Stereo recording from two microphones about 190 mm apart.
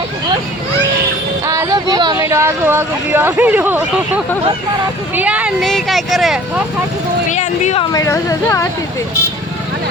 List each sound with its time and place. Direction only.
1.5 s a sound: 15° right (ahead or behind)
2.1 s speech: 15° right (ahead or behind)
7.3 s speech: 40° left (ahead or behind)
7.9 s speech: 15° left (ahead or behind)